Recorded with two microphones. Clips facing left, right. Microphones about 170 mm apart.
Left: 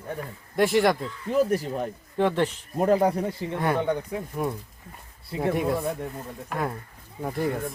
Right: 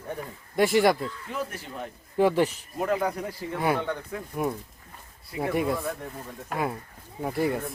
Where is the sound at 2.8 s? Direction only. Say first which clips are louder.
Left 6 dB; 30° left (ahead or behind).